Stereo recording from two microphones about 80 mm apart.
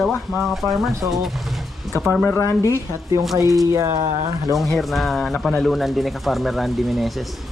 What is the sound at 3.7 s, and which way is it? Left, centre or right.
Speech, right.